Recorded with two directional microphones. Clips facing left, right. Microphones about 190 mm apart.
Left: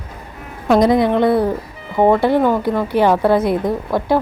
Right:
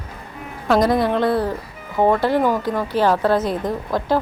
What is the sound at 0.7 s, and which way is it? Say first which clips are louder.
A woman's voice: left 4 dB; 15° left (ahead or behind).